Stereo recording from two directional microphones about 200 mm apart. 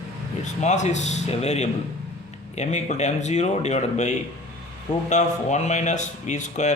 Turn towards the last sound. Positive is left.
turn(degrees=35)  # may be behind; listen again after turning